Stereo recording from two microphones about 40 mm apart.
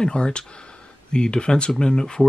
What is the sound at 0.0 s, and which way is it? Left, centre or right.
Speech, centre.